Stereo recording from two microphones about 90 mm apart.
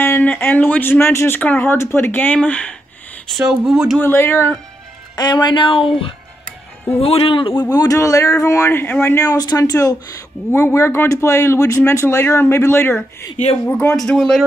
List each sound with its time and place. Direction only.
0.0 s speech: 20° left (ahead or behind)
3.3 s speech: 10° right (ahead or behind)
4.0 s speech: 25° left (ahead or behind)
5.1 s speech: 50° left (ahead or behind); by 5.9 s 70° left (ahead or behind)
7.0 s a man's voice: 90° left
7.7 s speech: 40° left (ahead or behind)
8.6 s speech: 25° left (ahead or behind); by 9.9 s 40° left (ahead or behind)
10.5 s speech: 30° left (ahead or behind)